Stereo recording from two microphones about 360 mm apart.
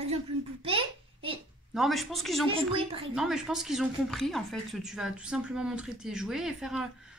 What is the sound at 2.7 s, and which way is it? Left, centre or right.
Child singing, centre.